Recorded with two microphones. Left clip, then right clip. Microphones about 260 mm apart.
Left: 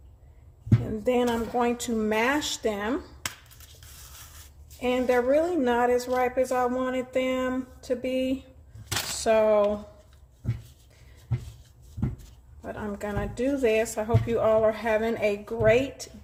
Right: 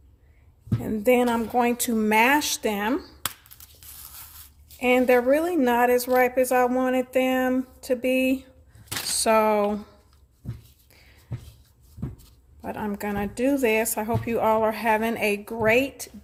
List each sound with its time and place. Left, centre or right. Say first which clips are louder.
0.9 s a woman's voice: right 5 dB; right
4.8 s a woman's voice: right 5 dB; right
12.6 s a woman's voice: right 3 dB; right